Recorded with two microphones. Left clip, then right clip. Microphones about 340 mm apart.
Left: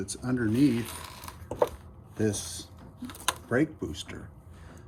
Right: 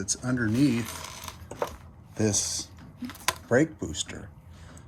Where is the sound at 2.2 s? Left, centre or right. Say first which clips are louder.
Right 3 dB; centre.